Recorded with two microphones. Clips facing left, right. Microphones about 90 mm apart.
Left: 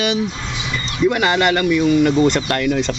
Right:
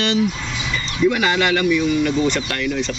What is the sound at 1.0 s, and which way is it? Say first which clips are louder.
Speech: left 1 dB; 25° left (ahead or behind).